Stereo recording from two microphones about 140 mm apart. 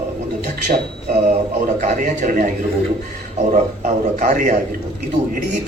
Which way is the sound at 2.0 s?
85° right.